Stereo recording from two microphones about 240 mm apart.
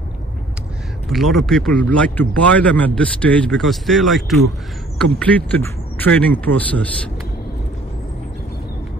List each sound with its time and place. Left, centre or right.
1.0 s speech: centre